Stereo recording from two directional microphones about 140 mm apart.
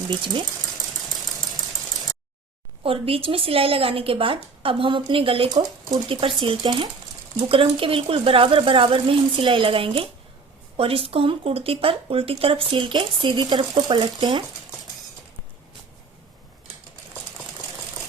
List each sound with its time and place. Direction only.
0.1 s speech: 35° right (ahead or behind)
2.8 s speech: 40° right (ahead or behind)